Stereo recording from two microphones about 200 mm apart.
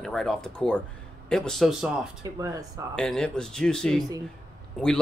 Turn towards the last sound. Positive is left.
turn(degrees=0)  # may be behind; listen again after turning